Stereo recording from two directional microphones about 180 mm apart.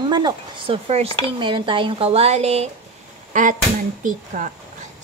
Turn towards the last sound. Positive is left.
turn(degrees=-45)  # may be behind; listen again after turning